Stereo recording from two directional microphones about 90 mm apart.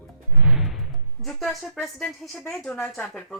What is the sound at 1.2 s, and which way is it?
A woman's voice, centre (ahead or behind).